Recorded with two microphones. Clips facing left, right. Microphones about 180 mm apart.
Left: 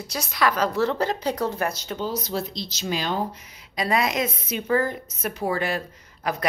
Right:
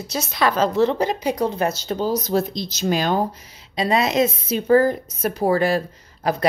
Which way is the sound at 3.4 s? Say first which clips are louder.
Right 4 dB; 30° right (ahead or behind).